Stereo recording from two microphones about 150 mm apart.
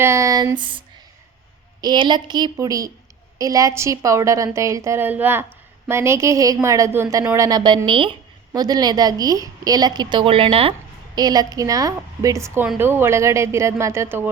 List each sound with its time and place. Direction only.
0.0 s a woman's voice: 20° right (ahead or behind)
1.8 s a woman's voice: 30° right (ahead or behind)